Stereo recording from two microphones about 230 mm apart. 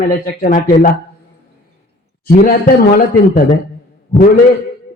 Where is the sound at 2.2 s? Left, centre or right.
Left.